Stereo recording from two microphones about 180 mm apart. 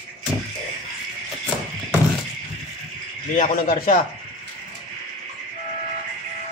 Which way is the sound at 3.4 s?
50° left (ahead or behind).